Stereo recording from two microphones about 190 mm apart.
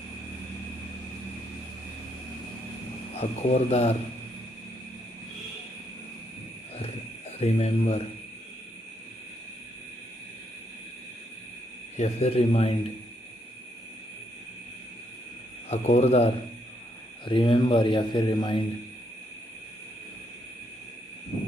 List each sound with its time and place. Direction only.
3.2 s speech: 35° left (ahead or behind)
7.3 s speech: 35° left (ahead or behind)
12.0 s speech: 35° left (ahead or behind)
15.7 s a man's voice: 35° left (ahead or behind)